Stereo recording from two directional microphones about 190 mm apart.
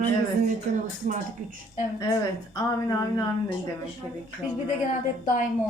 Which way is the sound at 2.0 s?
15° left (ahead or behind).